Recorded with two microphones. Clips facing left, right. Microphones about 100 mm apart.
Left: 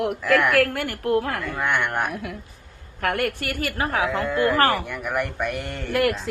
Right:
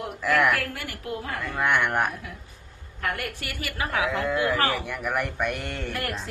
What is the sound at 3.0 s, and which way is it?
A woman's voice, 60° left (ahead or behind).